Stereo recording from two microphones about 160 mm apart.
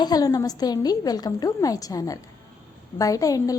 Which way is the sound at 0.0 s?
25° left (ahead or behind).